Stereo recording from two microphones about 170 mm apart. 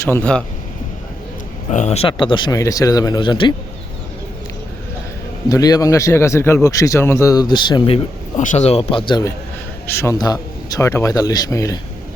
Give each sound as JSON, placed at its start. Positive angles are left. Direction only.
{"t": 0.0, "sound": "a man's voice", "side_deg": 10}
{"t": 1.7, "sound": "a man's voice", "side_deg": 40}
{"t": 5.5, "sound": "a man's voice", "side_deg": 20}
{"t": 8.4, "sound": "speech", "side_deg": 40}
{"t": 9.8, "sound": "a man's voice", "side_deg": 15}